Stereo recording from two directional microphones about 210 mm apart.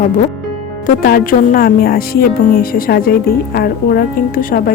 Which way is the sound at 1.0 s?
45° left (ahead or behind).